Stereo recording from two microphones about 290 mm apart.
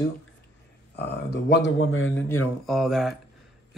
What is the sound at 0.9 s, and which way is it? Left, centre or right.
Speech, left.